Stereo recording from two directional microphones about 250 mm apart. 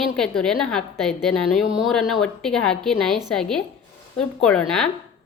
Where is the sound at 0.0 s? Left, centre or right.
Centre.